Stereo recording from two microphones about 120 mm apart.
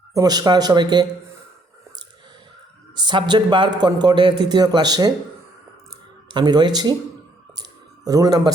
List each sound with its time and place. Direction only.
0.1 s a man's voice: 30° right (ahead or behind)
2.9 s a man's voice: 40° right (ahead or behind)
6.3 s a man's voice: 35° right (ahead or behind)
7.5 s a sound: 30° right (ahead or behind)